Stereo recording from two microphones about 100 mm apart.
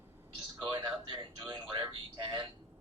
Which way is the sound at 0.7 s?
55° right (ahead or behind).